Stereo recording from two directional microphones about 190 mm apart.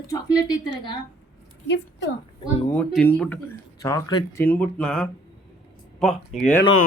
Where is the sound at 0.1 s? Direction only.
20° left (ahead or behind).